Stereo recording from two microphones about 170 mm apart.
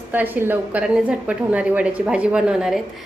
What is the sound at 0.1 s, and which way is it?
A woman's voice, 10° right (ahead or behind).